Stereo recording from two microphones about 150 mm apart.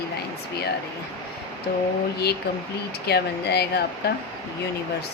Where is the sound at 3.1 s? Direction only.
90° left.